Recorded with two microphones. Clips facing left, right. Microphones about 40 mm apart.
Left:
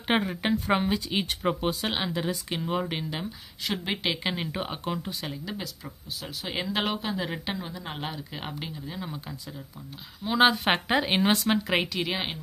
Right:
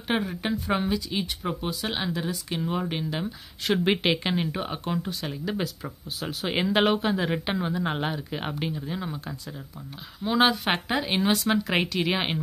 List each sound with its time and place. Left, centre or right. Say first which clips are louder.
0.1 s speech: left 1 dB; left
2.0 s speech: even; centre
3.9 s speech: right 5 dB; centre
4.2 s speech: right 3 dB; centre
5.3 s speech: right 6 dB; centre
7.5 s speech: right 8 dB; right
8.0 s speech: right 5 dB; centre
10.2 s speech: even; centre
10.6 s speech: left 2 dB; centre